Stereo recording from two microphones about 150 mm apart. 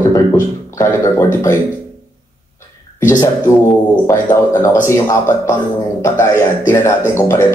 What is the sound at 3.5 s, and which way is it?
A man's voice, 10° left (ahead or behind).